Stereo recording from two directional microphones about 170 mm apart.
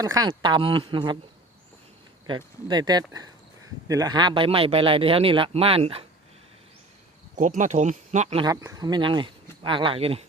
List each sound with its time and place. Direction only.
0.0 s speech: 20° right (ahead or behind)
2.2 s speech: 25° right (ahead or behind)
7.3 s speech: 50° right (ahead or behind)
8.4 s speech: 20° right (ahead or behind)